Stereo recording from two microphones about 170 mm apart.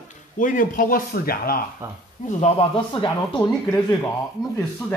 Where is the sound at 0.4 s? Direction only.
50° left (ahead or behind).